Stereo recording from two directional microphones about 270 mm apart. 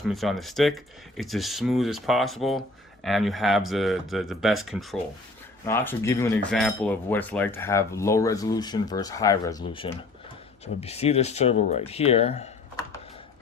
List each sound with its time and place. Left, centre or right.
0.0 s speech: centre
5.6 s cutlery: centre
10.8 s speech: left